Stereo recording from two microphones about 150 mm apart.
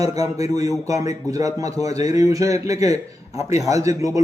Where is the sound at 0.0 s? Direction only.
20° right (ahead or behind).